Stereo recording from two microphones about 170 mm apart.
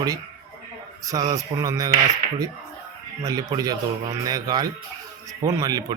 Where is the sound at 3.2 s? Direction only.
20° right (ahead or behind).